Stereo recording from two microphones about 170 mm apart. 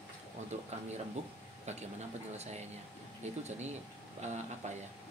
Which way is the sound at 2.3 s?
40° right (ahead or behind).